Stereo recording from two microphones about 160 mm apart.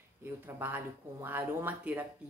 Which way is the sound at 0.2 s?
10° right (ahead or behind).